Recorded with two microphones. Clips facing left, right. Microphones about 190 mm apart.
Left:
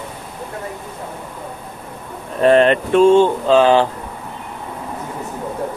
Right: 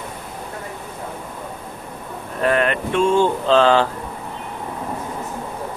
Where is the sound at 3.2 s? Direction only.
15° left (ahead or behind).